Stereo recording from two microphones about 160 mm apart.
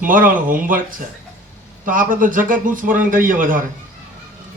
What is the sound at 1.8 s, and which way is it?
A man's voice, 55° right (ahead or behind).